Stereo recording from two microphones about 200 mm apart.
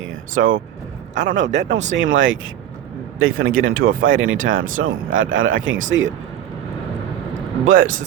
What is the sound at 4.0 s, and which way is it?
Speech, 85° right.